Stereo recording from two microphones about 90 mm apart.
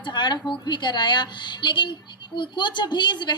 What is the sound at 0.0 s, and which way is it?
A woman's voice, 55° left (ahead or behind).